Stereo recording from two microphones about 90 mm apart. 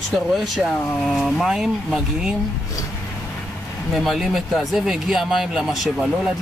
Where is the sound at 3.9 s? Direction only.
Centre (ahead or behind).